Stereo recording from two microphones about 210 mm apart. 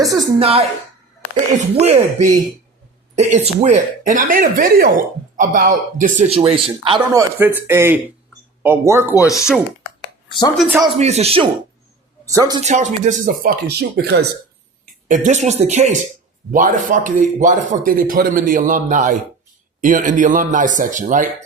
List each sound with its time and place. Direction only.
0.0 s speech: centre (ahead or behind)
0.3 s speech: 30° right (ahead or behind)
1.7 s speech: 30° right (ahead or behind); by 9.1 s 10° right (ahead or behind)
10.2 s speech: 20° left (ahead or behind)
10.6 s speech: centre (ahead or behind)
10.9 s speech: 30° right (ahead or behind)
12.2 s speech: 15° right (ahead or behind)
12.6 s speech: 35° right (ahead or behind); by 14.3 s 50° right (ahead or behind)
15.0 s speech: 35° right (ahead or behind)